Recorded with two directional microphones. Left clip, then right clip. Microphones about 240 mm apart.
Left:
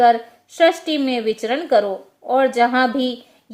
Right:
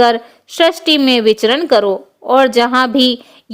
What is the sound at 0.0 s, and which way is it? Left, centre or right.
A woman's voice, right.